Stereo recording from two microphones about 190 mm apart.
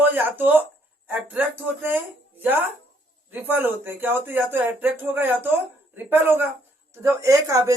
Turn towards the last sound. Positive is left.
turn(degrees=-15)  # may be behind; listen again after turning